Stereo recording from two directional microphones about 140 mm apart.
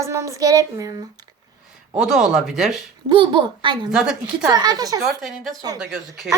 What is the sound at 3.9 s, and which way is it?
Speech, 5° right (ahead or behind).